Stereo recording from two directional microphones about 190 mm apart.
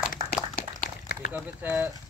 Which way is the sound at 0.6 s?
50° left (ahead or behind).